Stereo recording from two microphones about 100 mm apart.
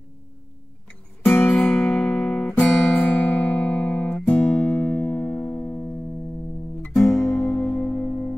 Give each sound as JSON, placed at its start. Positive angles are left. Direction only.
{"t": 1.3, "sound": "music", "side_deg": 20}
{"t": 1.6, "sound": "guitar", "side_deg": 5}
{"t": 7.2, "sound": "music", "side_deg": 30}
{"t": 7.6, "sound": "music", "side_deg": 15}